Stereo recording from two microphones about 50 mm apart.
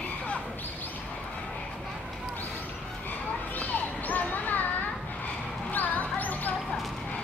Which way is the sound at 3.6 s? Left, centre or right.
Left.